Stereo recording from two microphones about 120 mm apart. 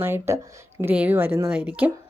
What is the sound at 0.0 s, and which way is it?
Speech, 20° right (ahead or behind).